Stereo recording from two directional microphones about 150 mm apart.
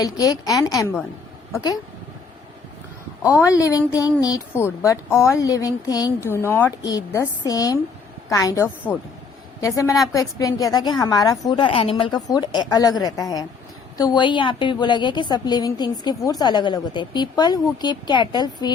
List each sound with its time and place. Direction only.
0.0 s a woman's voice: 25° left (ahead or behind)
3.4 s a woman's voice: 20° left (ahead or behind)